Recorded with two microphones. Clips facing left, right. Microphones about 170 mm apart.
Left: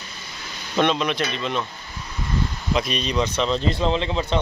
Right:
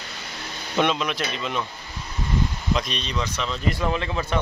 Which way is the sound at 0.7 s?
5° right (ahead or behind).